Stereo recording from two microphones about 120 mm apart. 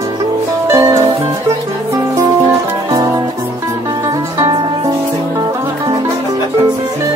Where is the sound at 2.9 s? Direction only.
25° right (ahead or behind).